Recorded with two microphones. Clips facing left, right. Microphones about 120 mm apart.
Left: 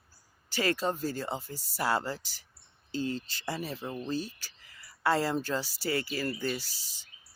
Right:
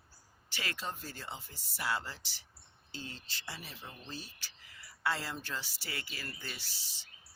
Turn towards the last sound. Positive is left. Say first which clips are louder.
# left 9 dB
turn(degrees=40)  # may be behind; listen again after turning